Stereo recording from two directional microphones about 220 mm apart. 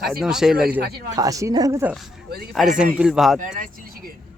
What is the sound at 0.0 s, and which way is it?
Speech, centre (ahead or behind).